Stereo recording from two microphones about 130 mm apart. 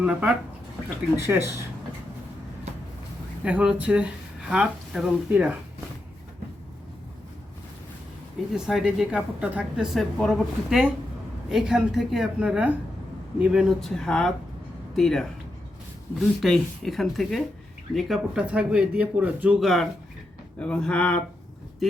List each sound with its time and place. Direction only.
0.0 s speech: 10° right (ahead or behind)
1.1 s speech: 20° right (ahead or behind)
3.4 s speech: 10° right (ahead or behind)
8.5 s speech: 5° right (ahead or behind)
19.5 s speech: centre (ahead or behind)